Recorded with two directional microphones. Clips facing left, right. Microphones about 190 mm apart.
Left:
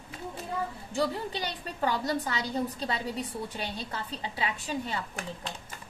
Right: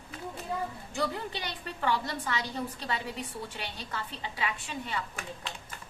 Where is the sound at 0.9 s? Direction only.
35° left (ahead or behind).